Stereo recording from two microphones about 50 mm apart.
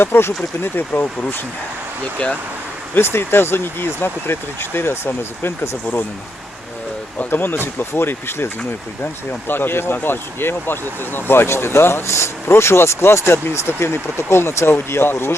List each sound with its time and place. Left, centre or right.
0.0 s speech: left
0.6 s speech: left
2.1 s speech: left
3.0 s speech: left
7.3 s speech: left
9.5 s speech: left